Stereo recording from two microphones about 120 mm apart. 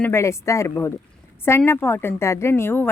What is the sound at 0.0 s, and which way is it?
Speech, 20° left (ahead or behind).